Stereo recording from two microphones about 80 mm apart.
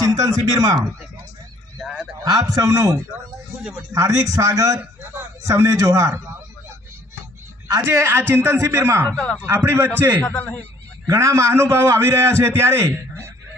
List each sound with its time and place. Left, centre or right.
0.2 s speech: right
1.8 s a sound: centre
2.2 s a man's voice: right
3.6 s a man's voice: centre
3.9 s a man's voice: right
7.9 s a man's voice: right
9.1 s speech: centre
9.6 s a man's voice: right
10.2 s speech: centre
11.1 s a man's voice: right